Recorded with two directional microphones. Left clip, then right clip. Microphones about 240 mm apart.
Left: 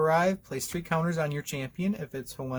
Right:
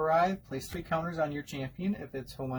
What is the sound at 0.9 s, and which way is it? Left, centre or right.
Speech, left.